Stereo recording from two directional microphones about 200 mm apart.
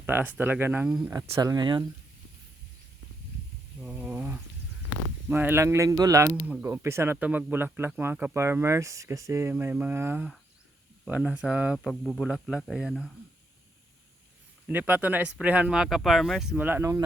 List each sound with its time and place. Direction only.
0.0 s speech: 10° right (ahead or behind)
1.3 s speech: 20° right (ahead or behind)
3.8 s a sound: 5° right (ahead or behind)
5.3 s speech: 10° right (ahead or behind)
14.7 s speech: 10° right (ahead or behind)